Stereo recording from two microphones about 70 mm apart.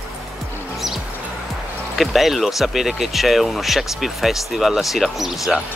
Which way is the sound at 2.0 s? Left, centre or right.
Centre.